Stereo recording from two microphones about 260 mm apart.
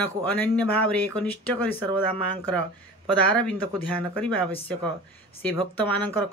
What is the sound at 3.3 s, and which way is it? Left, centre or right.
Speech, centre.